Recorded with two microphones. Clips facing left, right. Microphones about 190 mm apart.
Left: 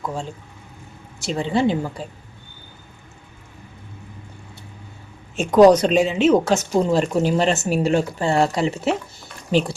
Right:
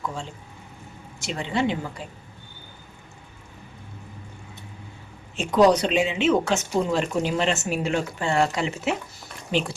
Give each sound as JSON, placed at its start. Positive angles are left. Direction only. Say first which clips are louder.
{"t": 1.2, "sound": "speech", "louder": "left 5 dB", "side_deg": 35}
{"t": 5.4, "sound": "speech", "louder": "left 6 dB", "side_deg": 45}